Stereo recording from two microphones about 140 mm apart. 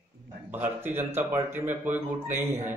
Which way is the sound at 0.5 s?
15° right (ahead or behind).